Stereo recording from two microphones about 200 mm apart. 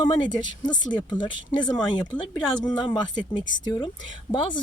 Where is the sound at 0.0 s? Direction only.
20° left (ahead or behind).